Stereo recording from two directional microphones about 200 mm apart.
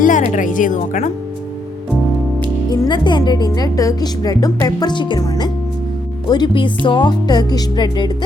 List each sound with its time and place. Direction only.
0.0 s speech: 40° left (ahead or behind)
2.6 s speech: 20° left (ahead or behind)